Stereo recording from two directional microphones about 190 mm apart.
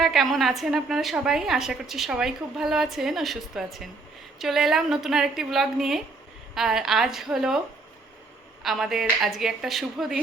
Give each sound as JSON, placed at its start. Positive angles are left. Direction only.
{"t": 0.0, "sound": "a woman's voice", "side_deg": 0}
{"t": 8.6, "sound": "a woman's voice", "side_deg": 0}